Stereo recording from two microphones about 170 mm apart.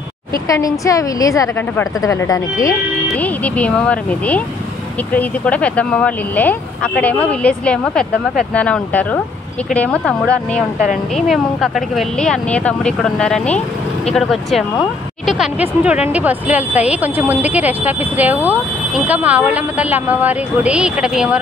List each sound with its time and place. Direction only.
0.5 s a woman's voice: 20° left (ahead or behind)
3.2 s speech: 10° left (ahead or behind)